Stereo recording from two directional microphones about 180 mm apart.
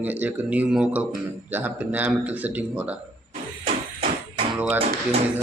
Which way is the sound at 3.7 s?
30° right (ahead or behind).